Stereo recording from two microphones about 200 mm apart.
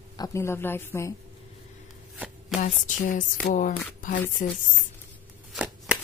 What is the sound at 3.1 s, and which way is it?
Speech, 40° left (ahead or behind).